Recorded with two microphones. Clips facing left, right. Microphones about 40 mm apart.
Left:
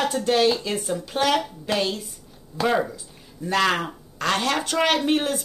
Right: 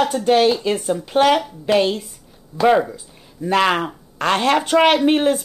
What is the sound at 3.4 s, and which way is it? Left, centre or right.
Speech, right.